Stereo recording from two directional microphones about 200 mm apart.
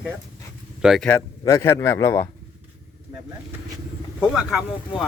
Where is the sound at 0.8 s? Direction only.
Centre (ahead or behind).